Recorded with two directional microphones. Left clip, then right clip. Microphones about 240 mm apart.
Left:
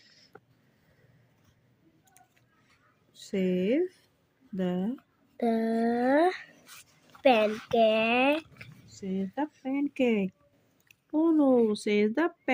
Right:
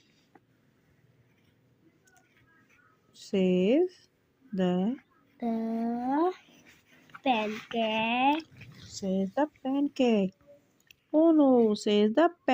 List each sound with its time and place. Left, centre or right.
3.1 s speech: centre
5.4 s speech: left
8.9 s speech: centre